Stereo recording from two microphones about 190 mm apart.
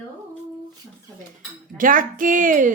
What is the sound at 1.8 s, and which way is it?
Speech, 45° right (ahead or behind).